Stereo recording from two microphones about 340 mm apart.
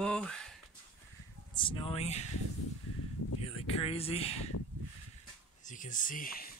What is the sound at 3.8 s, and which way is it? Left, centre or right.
Speech, centre.